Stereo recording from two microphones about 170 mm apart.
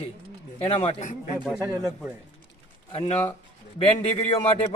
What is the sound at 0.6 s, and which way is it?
Speech, 35° left (ahead or behind).